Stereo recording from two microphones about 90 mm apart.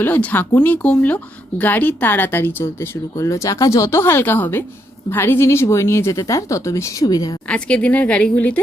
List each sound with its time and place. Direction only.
0.0 s a woman's voice: 20° left (ahead or behind); by 7.3 s 45° left (ahead or behind)
7.4 s a woman's voice: 15° left (ahead or behind)